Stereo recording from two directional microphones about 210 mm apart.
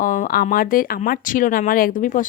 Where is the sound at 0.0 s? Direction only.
40° left (ahead or behind).